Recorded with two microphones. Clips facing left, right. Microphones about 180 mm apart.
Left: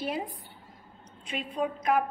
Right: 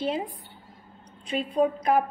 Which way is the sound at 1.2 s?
35° right (ahead or behind).